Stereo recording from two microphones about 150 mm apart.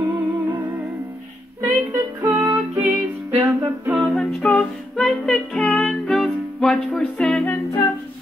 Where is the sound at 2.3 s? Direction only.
10° right (ahead or behind).